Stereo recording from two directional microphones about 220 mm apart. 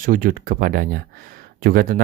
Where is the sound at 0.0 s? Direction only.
40° right (ahead or behind).